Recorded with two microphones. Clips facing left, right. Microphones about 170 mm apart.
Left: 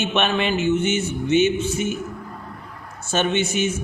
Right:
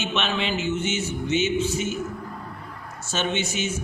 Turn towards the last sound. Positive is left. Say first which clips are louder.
# left 5 dB
turn(degrees=55)  # may be behind; listen again after turning